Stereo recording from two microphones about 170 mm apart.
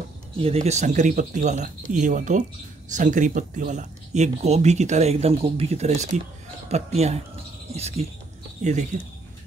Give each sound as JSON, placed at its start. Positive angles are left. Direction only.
{"t": 0.4, "sound": "speech", "side_deg": -35}